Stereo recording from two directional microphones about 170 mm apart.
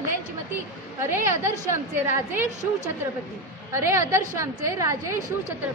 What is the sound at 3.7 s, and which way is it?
A woman's voice, 15° right (ahead or behind).